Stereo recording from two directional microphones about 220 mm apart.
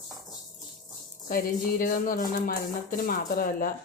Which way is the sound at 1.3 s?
40° left (ahead or behind).